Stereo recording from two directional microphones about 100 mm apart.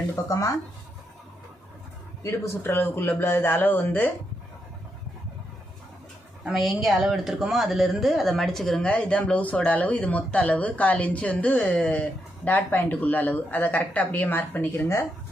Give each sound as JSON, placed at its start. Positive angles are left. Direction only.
{"t": 0.3, "sound": "speech", "side_deg": 30}
{"t": 2.2, "sound": "speech", "side_deg": 30}
{"t": 6.4, "sound": "speech", "side_deg": 0}